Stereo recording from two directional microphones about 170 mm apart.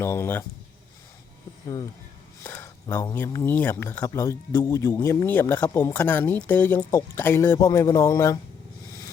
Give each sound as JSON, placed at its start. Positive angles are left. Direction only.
{"t": 0.0, "sound": "speech", "side_deg": 15}
{"t": 1.6, "sound": "speech", "side_deg": 25}